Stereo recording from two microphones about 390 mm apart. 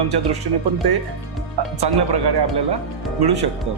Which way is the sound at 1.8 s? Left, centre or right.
Right.